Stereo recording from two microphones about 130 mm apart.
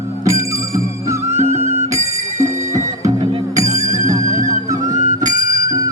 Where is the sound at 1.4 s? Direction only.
65° right (ahead or behind).